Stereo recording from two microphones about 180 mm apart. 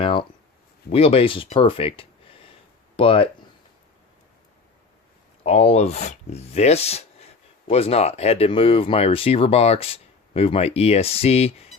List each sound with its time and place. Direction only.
0.0 s a sound: 30° left (ahead or behind)
0.9 s speech: 30° left (ahead or behind)
5.4 s speech: 35° left (ahead or behind)